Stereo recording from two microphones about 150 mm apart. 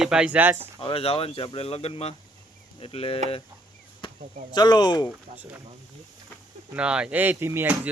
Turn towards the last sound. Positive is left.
turn(degrees=-15)  # may be behind; listen again after turning